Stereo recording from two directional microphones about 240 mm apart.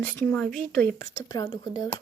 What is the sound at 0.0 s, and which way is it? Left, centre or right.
Speech, centre.